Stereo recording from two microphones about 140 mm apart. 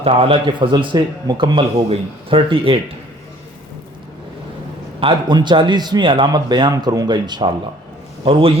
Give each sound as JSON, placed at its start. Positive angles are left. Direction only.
{"t": 0.0, "sound": "a man's voice", "side_deg": -40}
{"t": 4.9, "sound": "a man's voice", "side_deg": -35}